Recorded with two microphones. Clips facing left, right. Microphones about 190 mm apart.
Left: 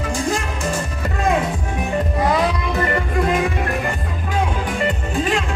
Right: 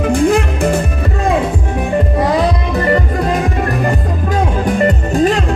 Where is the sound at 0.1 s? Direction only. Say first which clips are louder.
Right 10 dB; 60° right (ahead or behind).